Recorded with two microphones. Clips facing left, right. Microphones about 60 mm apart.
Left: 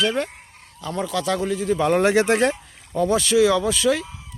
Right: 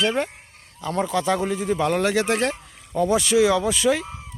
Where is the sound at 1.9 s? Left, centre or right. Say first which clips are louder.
Left 4 dB; left.